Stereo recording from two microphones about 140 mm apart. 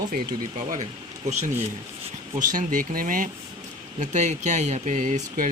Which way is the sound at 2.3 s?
70° right (ahead or behind).